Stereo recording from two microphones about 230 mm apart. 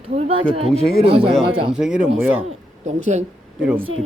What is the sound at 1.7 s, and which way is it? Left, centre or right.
Speech, centre.